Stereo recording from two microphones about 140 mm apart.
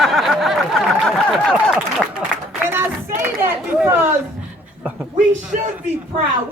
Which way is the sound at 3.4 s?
15° right (ahead or behind).